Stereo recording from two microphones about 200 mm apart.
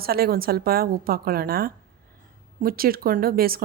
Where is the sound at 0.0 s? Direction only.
50° right (ahead or behind).